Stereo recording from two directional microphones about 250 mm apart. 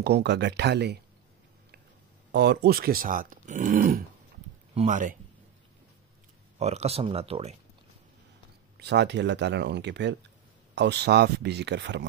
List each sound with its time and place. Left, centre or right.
0.0 s speech: right
2.3 s speech: right
6.6 s speech: right
8.7 s speech: right